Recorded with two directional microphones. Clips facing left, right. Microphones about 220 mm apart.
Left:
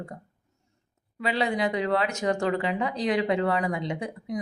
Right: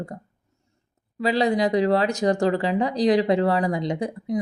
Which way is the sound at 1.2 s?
35° right (ahead or behind).